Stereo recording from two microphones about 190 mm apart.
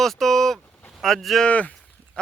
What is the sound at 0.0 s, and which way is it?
Speech, centre (ahead or behind).